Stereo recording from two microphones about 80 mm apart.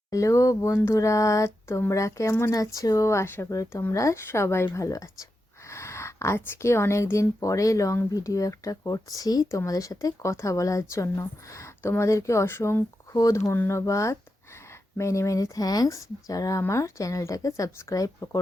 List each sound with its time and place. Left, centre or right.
0.1 s a woman's voice: left
13.1 s a woman's voice: left